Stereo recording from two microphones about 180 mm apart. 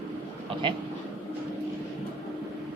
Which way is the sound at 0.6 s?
25° right (ahead or behind).